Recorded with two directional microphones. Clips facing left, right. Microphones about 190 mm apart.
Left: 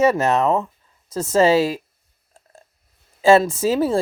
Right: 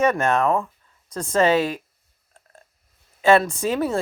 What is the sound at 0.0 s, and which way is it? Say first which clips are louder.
Speech: left 3 dB; 25° left (ahead or behind).